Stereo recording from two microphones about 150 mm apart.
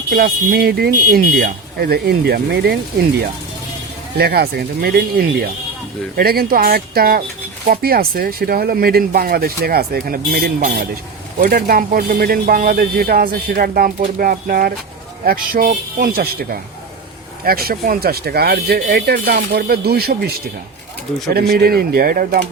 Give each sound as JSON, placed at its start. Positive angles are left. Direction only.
{"t": 0.1, "sound": "speech", "side_deg": -90}
{"t": 4.2, "sound": "speech", "side_deg": -90}
{"t": 17.4, "sound": "speech", "side_deg": -90}
{"t": 21.3, "sound": "speech", "side_deg": -90}